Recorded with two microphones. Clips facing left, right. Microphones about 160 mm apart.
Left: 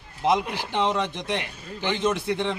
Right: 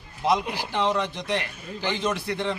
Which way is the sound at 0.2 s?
20° left (ahead or behind).